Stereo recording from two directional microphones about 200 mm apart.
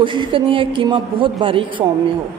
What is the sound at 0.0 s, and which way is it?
Speech, 25° right (ahead or behind).